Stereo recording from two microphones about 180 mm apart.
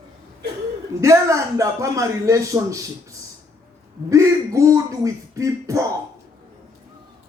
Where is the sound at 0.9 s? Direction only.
15° right (ahead or behind).